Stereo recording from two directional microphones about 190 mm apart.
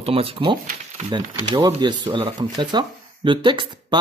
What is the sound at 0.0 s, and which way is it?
Speech, 30° right (ahead or behind).